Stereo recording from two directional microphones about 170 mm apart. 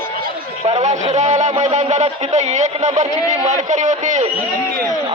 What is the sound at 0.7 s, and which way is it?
A man's voice, 40° right (ahead or behind).